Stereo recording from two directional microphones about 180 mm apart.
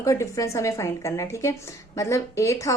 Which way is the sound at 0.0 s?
15° left (ahead or behind).